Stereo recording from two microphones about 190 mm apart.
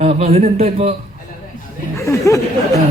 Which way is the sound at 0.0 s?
35° right (ahead or behind).